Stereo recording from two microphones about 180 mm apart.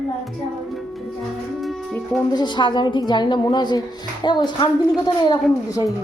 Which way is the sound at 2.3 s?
25° left (ahead or behind).